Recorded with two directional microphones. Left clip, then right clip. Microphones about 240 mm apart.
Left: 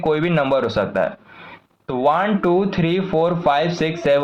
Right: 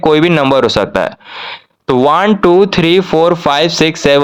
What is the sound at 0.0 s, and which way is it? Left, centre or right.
Speech, right.